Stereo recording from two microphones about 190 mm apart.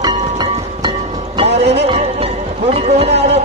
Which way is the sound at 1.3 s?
30° right (ahead or behind).